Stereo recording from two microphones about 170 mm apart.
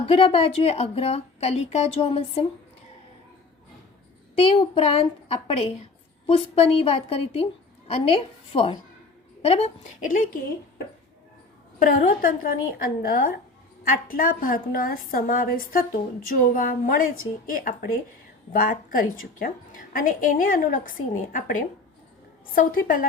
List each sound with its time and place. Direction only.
0.0 s a woman's voice: 35° left (ahead or behind)
4.4 s a woman's voice: 35° left (ahead or behind); by 10.2 s 50° left (ahead or behind)
11.8 s a woman's voice: 55° left (ahead or behind)